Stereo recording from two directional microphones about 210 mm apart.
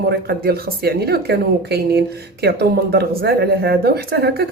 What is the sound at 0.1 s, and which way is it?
A woman's voice, 50° right (ahead or behind).